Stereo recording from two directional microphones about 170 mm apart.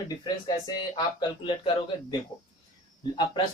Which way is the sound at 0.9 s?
30° left (ahead or behind).